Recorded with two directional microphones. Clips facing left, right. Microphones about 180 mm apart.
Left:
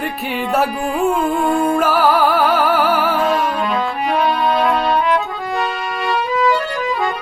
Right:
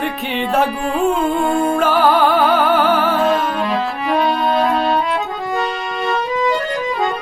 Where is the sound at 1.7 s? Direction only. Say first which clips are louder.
Even; 5° left (ahead or behind).